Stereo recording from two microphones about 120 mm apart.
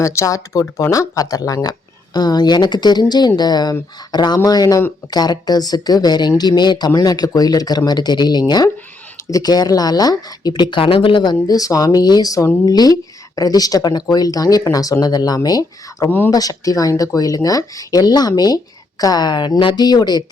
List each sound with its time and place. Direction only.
0.0 s speech: 25° left (ahead or behind)